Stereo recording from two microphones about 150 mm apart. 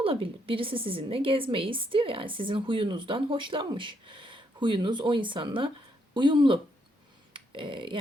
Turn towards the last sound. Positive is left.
turn(degrees=-35)  # may be behind; listen again after turning